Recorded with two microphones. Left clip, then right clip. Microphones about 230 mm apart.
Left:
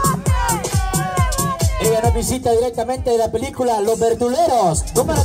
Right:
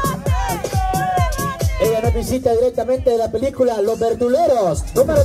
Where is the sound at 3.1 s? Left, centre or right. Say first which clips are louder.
Even; left.